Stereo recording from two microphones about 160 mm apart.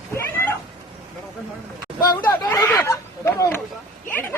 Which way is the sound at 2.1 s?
20° left (ahead or behind).